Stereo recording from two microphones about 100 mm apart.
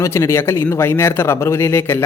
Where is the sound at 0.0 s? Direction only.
30° left (ahead or behind).